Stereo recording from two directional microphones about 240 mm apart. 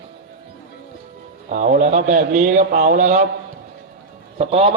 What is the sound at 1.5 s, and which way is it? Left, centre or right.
A man's voice, right.